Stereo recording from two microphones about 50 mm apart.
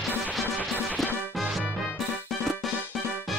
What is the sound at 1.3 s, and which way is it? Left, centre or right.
Music, centre.